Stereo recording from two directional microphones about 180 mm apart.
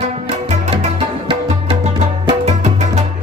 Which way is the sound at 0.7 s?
35° right (ahead or behind).